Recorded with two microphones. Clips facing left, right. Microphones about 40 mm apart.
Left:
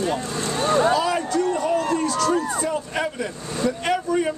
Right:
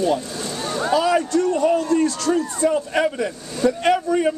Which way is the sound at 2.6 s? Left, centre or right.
Centre.